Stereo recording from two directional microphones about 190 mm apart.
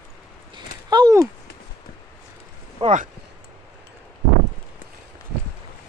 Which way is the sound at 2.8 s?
40° right (ahead or behind).